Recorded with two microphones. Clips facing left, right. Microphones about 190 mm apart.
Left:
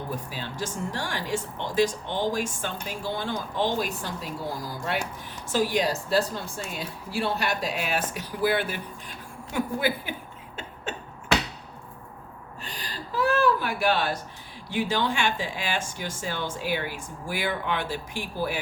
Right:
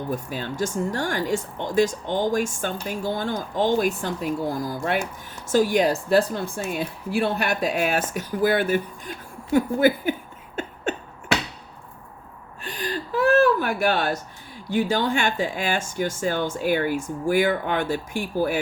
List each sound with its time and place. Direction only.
0.3 s speech: 50° right (ahead or behind)
5.5 s speech: 45° right (ahead or behind)
9.5 s a sound: 45° right (ahead or behind)
12.6 s gasp: 50° right (ahead or behind)
14.7 s speech: 45° right (ahead or behind)